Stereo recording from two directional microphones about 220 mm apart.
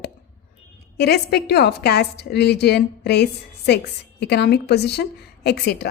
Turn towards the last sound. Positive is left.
turn(degrees=50)  # may be behind; listen again after turning